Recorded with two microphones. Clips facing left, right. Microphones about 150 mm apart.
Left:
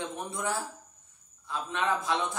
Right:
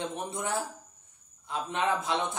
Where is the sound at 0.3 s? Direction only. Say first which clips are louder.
Right 1 dB; 20° right (ahead or behind).